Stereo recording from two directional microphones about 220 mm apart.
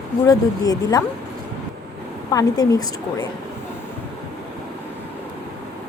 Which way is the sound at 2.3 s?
15° left (ahead or behind).